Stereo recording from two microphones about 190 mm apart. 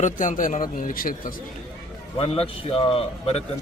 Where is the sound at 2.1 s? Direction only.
30° left (ahead or behind).